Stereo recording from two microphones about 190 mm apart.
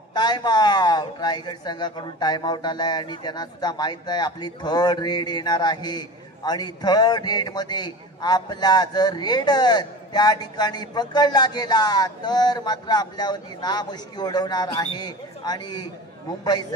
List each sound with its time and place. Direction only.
0.1 s a man's voice: 20° left (ahead or behind)